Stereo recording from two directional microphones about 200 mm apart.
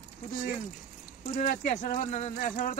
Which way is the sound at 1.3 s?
40° left (ahead or behind).